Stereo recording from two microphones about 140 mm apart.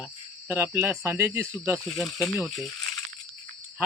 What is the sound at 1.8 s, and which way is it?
Speech, centre (ahead or behind).